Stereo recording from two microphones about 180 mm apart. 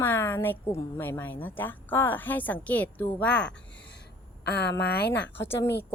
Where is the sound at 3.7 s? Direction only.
75° left (ahead or behind).